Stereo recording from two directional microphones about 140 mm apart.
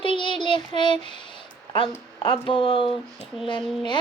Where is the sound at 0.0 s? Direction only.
35° left (ahead or behind).